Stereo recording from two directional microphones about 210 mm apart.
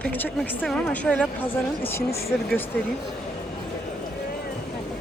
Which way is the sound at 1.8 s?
30° left (ahead or behind).